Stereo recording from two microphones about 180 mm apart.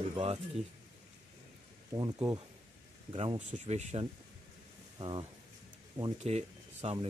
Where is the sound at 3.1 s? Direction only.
35° right (ahead or behind).